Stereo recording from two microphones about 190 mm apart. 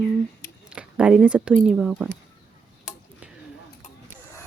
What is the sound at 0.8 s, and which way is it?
Speech, 5° right (ahead or behind).